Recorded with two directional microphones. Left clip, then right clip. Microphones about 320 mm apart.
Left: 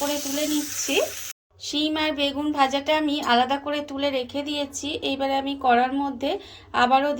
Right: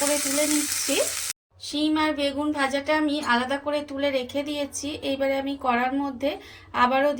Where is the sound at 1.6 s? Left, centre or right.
Centre.